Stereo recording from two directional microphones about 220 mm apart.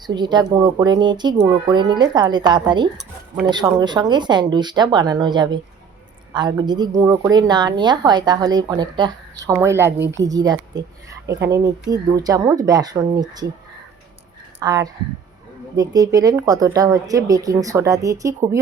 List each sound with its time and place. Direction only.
0.1 s speech: 20° right (ahead or behind)
14.6 s speech: 15° right (ahead or behind)